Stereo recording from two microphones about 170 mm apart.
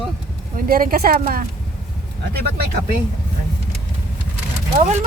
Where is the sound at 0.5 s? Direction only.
55° right (ahead or behind).